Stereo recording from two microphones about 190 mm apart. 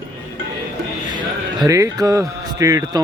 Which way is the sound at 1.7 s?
20° right (ahead or behind).